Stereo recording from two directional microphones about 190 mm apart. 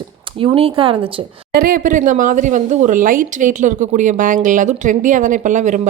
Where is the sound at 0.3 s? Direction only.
30° right (ahead or behind).